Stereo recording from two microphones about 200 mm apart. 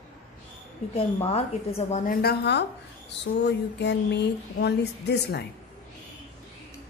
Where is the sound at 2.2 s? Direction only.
55° left (ahead or behind).